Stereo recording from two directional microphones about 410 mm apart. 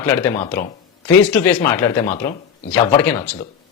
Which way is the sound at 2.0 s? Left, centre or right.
Centre.